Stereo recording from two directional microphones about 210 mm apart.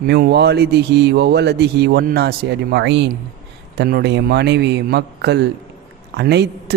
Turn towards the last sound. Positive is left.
turn(degrees=-55)  # may be behind; listen again after turning